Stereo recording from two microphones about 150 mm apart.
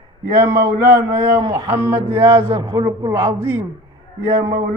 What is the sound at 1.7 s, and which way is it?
Speech, 15° right (ahead or behind).